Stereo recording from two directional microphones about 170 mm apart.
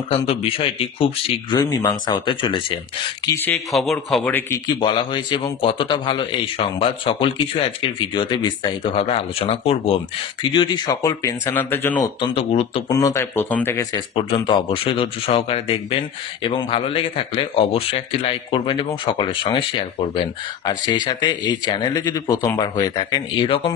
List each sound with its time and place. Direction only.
0.1 s speech: 35° left (ahead or behind)
3.5 s speech: centre (ahead or behind)
4.3 s speech: 10° left (ahead or behind)
4.6 s speech: 30° left (ahead or behind); by 12.0 s 10° left (ahead or behind)
12.2 s speech: 35° left (ahead or behind)
12.9 s speech: 20° left (ahead or behind)
13.9 s speech: 30° left (ahead or behind)